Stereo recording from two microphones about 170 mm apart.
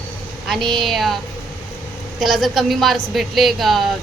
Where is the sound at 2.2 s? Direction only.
Centre (ahead or behind).